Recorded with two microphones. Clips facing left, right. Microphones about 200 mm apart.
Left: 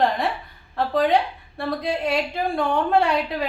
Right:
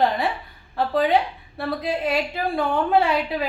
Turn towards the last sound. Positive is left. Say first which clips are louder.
# even
turn(degrees=0)  # may be behind; listen again after turning